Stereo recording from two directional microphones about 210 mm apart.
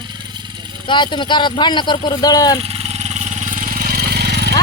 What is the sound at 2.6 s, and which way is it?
Vehicle, 30° right (ahead or behind).